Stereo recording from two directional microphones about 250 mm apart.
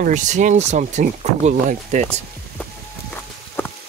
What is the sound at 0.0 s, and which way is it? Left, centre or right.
Speech, right.